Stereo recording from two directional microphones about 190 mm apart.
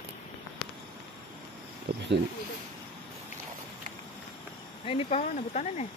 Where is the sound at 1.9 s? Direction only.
55° right (ahead or behind).